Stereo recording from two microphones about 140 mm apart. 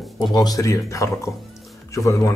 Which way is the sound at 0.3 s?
30° left (ahead or behind).